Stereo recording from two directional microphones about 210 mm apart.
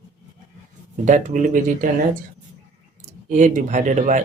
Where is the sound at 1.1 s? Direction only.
35° right (ahead or behind).